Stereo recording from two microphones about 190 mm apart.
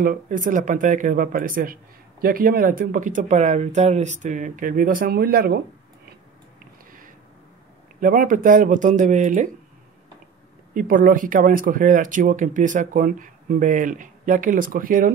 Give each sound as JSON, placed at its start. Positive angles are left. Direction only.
{"t": 0.0, "sound": "speech", "side_deg": -45}
{"t": 8.0, "sound": "speech", "side_deg": -45}
{"t": 10.7, "sound": "speech", "side_deg": -45}